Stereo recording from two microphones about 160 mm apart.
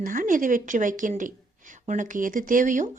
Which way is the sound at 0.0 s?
55° right (ahead or behind).